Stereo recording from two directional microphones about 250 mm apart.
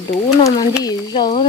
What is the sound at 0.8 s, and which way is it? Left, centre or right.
Speech, centre.